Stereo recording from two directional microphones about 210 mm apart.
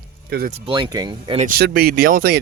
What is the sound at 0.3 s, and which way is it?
Speech, 45° right (ahead or behind).